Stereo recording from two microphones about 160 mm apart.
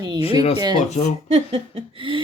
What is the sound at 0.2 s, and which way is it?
Speech, 35° left (ahead or behind).